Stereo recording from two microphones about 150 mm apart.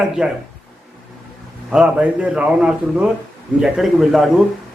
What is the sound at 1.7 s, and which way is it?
A man's voice, 5° right (ahead or behind).